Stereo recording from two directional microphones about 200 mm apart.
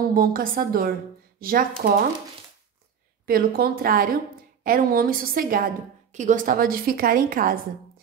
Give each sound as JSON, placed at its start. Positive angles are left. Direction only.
{"t": 0.1, "sound": "a woman's voice", "side_deg": -45}
{"t": 3.3, "sound": "a woman's voice", "side_deg": -50}